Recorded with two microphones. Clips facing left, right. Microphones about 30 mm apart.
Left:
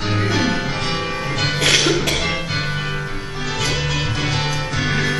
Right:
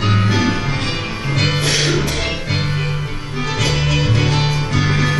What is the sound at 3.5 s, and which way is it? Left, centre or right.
Music, centre.